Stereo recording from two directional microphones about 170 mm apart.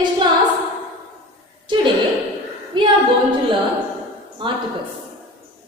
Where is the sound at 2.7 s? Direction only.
30° right (ahead or behind).